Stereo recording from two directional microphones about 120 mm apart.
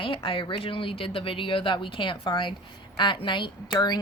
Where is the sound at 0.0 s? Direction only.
50° left (ahead or behind).